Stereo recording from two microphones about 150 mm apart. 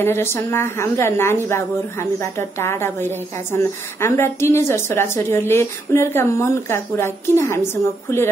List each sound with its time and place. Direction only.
0.0 s a woman's voice: 15° left (ahead or behind)